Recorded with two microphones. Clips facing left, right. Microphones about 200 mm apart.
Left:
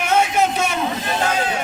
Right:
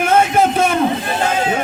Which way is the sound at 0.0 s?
50° right (ahead or behind).